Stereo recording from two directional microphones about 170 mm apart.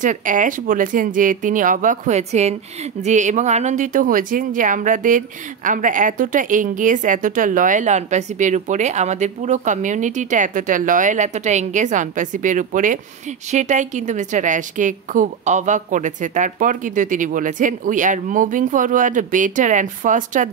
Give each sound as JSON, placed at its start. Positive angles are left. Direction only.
{"t": 0.0, "sound": "speech", "side_deg": -50}